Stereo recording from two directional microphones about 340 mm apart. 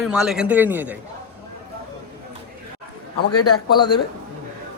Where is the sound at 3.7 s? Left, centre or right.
Centre.